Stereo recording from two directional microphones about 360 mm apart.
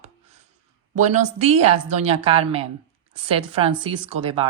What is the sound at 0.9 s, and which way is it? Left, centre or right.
A woman's voice, centre.